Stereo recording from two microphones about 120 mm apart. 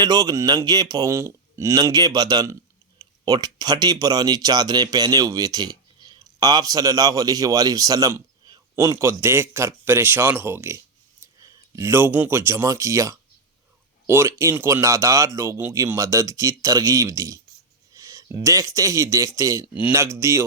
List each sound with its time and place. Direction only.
0.0 s a man's voice: 35° right (ahead or behind)
17.9 s a sound: 25° right (ahead or behind)
18.4 s speech: 25° right (ahead or behind)
19.6 s speech: 10° right (ahead or behind)
20.1 s speech: 25° right (ahead or behind)